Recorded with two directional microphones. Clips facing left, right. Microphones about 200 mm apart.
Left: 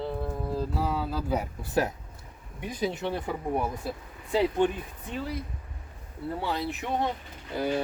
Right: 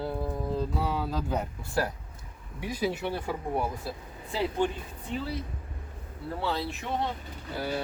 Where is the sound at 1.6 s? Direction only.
20° left (ahead or behind).